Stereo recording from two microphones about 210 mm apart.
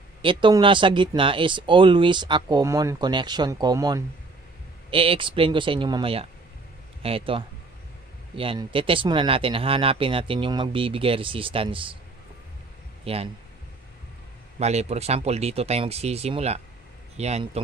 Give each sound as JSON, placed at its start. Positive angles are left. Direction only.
{"t": 0.2, "sound": "speech", "side_deg": -25}
{"t": 13.0, "sound": "speech", "side_deg": -30}
{"t": 14.6, "sound": "speech", "side_deg": -30}